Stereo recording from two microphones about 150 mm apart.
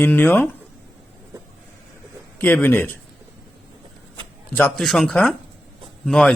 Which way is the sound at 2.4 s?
15° left (ahead or behind).